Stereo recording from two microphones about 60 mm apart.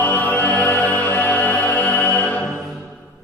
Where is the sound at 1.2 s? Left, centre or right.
Left.